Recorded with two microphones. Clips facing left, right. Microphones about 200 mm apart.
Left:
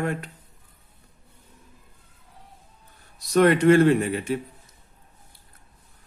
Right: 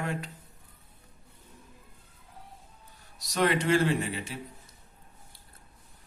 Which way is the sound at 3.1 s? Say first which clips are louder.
Left 9 dB; 55° left (ahead or behind).